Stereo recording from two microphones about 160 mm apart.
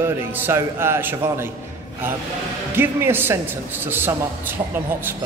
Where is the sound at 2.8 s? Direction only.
15° right (ahead or behind).